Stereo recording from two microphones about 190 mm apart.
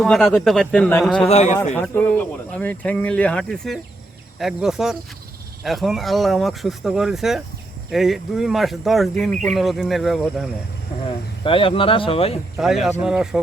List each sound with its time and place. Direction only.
0.0 s speech: centre (ahead or behind)
1.3 s speech: 35° left (ahead or behind)
1.7 s speech: 10° left (ahead or behind)
11.4 s speech: 30° left (ahead or behind)
12.5 s speech: centre (ahead or behind)